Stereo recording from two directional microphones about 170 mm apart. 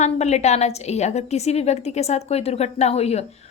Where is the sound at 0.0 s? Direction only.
40° left (ahead or behind).